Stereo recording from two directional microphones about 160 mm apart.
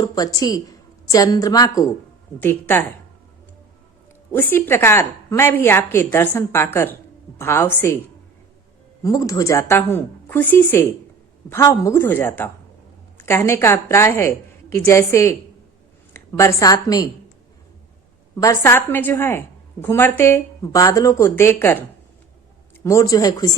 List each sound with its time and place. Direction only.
0.0 s a woman's voice: 25° left (ahead or behind)
4.3 s a woman's voice: 15° left (ahead or behind)
9.0 s a woman's voice: 20° left (ahead or behind)
18.3 s a woman's voice: 20° left (ahead or behind)